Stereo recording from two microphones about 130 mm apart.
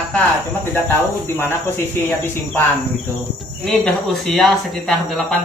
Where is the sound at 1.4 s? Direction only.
15° left (ahead or behind).